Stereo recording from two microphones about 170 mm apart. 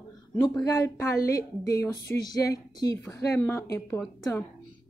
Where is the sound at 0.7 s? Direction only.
15° left (ahead or behind).